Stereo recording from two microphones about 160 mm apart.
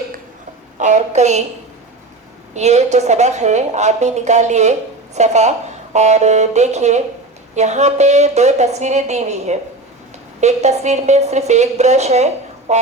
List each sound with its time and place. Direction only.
0.8 s a woman's voice: 50° right (ahead or behind)
2.5 s a woman's voice: 45° right (ahead or behind)